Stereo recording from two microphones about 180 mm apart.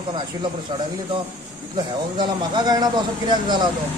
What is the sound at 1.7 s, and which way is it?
A man's voice, 25° right (ahead or behind).